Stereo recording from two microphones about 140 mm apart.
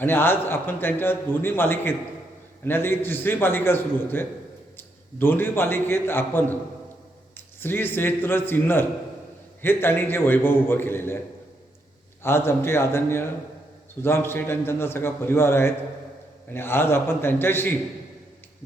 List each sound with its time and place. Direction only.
0.0 s a man's voice: 15° left (ahead or behind)
12.2 s a man's voice: 15° left (ahead or behind)